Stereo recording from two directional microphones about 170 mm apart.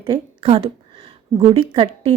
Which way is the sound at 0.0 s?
30° right (ahead or behind).